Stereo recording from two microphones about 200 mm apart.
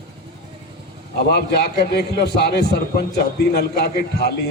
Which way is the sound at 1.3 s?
55° left (ahead or behind).